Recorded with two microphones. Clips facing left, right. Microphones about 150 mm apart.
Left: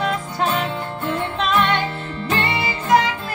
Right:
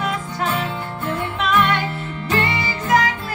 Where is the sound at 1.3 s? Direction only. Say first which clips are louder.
Right 1 dB; 25° left (ahead or behind).